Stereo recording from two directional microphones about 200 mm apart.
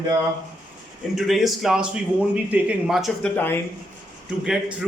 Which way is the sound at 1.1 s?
Centre (ahead or behind).